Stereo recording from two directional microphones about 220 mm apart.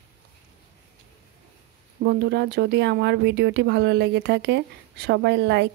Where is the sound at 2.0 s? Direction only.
50° right (ahead or behind).